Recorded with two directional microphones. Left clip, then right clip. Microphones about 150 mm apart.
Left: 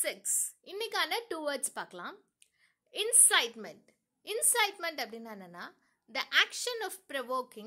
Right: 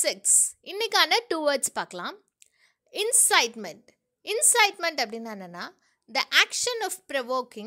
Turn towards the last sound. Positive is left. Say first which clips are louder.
# right 7 dB
turn(degrees=-35)  # may be behind; listen again after turning